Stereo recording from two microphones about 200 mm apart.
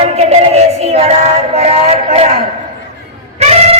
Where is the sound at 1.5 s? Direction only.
30° right (ahead or behind).